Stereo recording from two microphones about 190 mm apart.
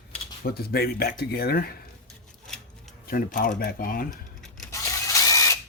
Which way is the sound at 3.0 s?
50° left (ahead or behind).